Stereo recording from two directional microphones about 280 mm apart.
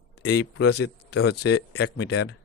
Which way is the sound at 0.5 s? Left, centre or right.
Left.